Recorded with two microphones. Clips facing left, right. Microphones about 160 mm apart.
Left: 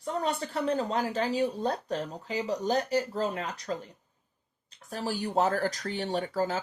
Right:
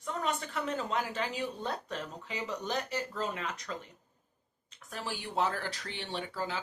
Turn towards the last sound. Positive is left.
turn(degrees=45)  # may be behind; listen again after turning